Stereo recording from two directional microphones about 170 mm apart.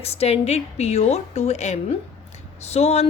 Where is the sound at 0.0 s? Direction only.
35° left (ahead or behind).